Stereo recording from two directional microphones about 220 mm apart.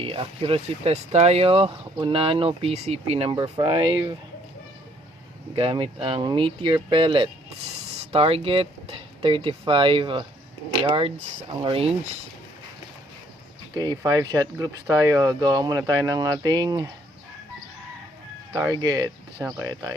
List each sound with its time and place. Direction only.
0.0 s speech: 25° right (ahead or behind)
5.5 s speech: 25° right (ahead or behind)
13.7 s speech: 15° right (ahead or behind)
18.5 s speech: 15° right (ahead or behind)